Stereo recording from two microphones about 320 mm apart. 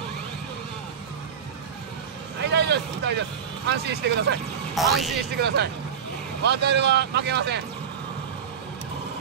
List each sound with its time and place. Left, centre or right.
2.4 s speech: right
4.7 s speech: centre
6.4 s speech: right